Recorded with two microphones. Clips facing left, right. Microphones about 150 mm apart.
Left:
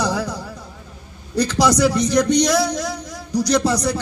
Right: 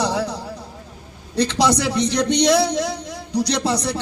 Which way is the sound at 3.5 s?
30° right (ahead or behind).